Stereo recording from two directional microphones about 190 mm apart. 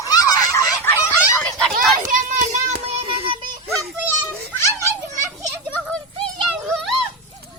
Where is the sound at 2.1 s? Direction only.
40° right (ahead or behind).